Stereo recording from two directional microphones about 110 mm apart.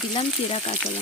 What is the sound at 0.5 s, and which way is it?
Frying, 75° left (ahead or behind).